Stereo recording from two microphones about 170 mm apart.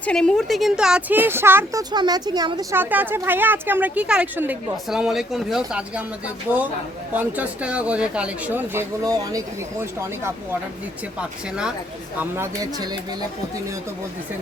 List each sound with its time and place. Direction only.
0.0 s a woman's voice: 5° left (ahead or behind); by 1.8 s 15° right (ahead or behind)
1.9 s speech: 25° right (ahead or behind)
2.7 s speech: 10° right (ahead or behind)
11.2 s a woman's voice: 5° right (ahead or behind)
12.2 s speech: 15° right (ahead or behind)